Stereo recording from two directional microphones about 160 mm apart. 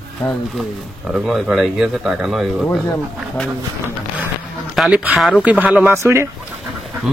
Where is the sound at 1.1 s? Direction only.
Centre (ahead or behind).